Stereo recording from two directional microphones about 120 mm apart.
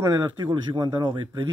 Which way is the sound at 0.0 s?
35° right (ahead or behind).